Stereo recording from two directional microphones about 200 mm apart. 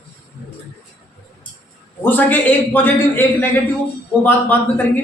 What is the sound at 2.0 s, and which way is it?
A man's voice, 10° left (ahead or behind).